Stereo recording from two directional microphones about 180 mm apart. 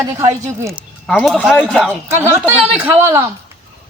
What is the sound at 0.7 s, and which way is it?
Speech, centre (ahead or behind).